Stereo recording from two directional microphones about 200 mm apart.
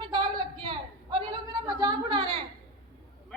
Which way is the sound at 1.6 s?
20° right (ahead or behind).